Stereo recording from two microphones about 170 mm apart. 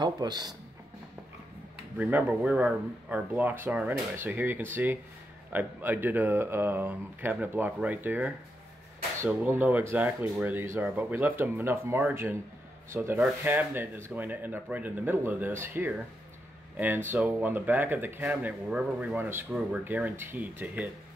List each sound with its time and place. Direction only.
0.0 s speech: 25° right (ahead or behind)
2.0 s speech: 10° right (ahead or behind)